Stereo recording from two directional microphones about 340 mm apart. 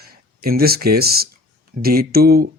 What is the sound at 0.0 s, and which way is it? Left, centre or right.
Speech, right.